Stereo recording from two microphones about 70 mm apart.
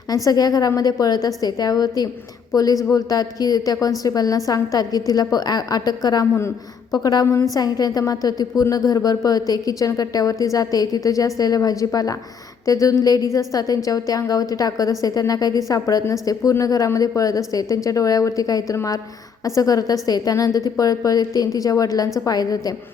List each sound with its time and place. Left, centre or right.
0.1 s a woman's voice: left